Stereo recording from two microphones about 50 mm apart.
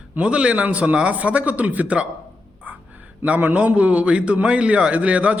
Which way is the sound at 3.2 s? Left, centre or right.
Right.